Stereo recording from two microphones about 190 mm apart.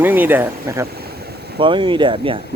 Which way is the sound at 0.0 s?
10° right (ahead or behind).